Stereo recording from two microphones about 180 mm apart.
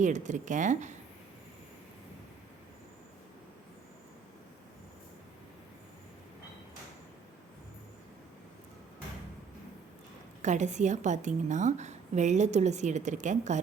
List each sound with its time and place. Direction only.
0.0 s speech: 45° right (ahead or behind)
10.4 s a woman's voice: 40° right (ahead or behind)